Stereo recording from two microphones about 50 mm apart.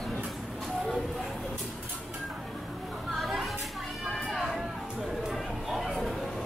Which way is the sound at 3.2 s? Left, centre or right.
Centre.